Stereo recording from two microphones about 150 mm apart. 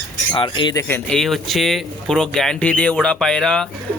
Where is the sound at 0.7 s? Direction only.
15° left (ahead or behind).